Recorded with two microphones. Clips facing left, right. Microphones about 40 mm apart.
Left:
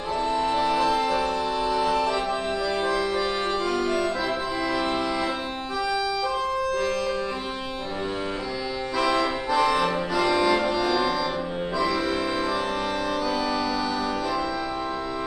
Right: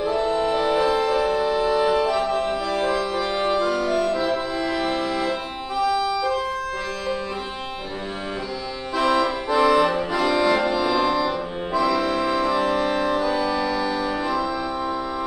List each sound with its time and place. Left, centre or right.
0.1 s music: centre
5.8 s organ: centre
8.9 s accordion: centre